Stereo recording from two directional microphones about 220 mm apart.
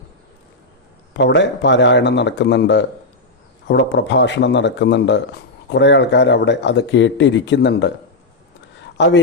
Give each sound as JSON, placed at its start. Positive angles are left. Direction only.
{"t": 1.1, "sound": "speech", "side_deg": 55}
{"t": 9.0, "sound": "a man's voice", "side_deg": 50}